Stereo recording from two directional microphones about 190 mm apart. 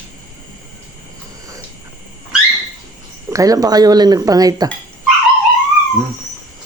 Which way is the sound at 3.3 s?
20° right (ahead or behind).